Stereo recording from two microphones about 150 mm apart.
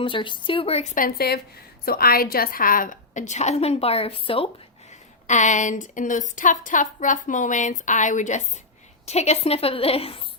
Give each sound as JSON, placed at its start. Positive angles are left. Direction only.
{"t": 0.0, "sound": "a woman's voice", "side_deg": 35}
{"t": 0.9, "sound": "a woman's voice", "side_deg": 80}
{"t": 5.3, "sound": "a woman's voice", "side_deg": 55}